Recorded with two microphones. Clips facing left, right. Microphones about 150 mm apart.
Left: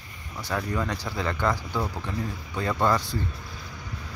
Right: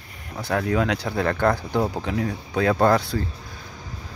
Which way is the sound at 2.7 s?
60° right (ahead or behind).